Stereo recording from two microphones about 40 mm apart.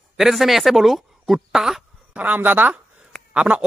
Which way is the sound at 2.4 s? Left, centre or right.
Right.